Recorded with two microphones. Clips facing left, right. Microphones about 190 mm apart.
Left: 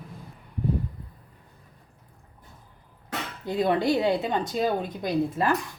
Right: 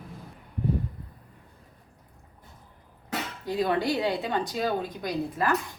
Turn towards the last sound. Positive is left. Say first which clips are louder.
# left 3 dB
turn(degrees=25)  # may be behind; listen again after turning